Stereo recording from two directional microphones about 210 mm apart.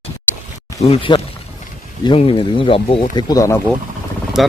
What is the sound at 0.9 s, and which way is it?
Speech, 25° left (ahead or behind).